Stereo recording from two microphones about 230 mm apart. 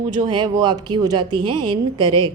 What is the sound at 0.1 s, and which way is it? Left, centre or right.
Speech, centre.